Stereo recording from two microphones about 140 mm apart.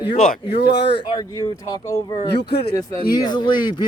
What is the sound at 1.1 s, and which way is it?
Speech, 30° left (ahead or behind).